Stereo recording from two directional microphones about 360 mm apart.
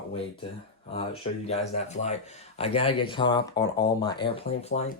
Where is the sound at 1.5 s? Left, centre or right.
Centre.